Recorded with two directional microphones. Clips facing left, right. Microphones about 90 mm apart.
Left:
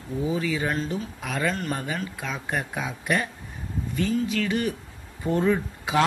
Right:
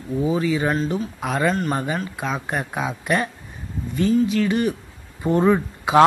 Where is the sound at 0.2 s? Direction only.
40° right (ahead or behind).